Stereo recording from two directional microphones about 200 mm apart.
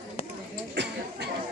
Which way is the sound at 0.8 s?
60° right (ahead or behind).